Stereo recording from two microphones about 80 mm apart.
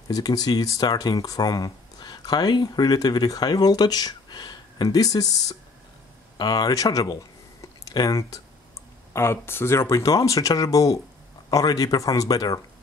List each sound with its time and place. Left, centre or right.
0.1 s speech: left
9.1 s speech: left